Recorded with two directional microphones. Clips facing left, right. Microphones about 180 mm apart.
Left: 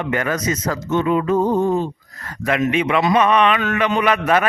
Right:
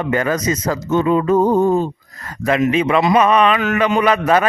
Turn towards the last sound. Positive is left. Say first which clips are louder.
# right 2 dB
turn(degrees=-30)  # may be behind; listen again after turning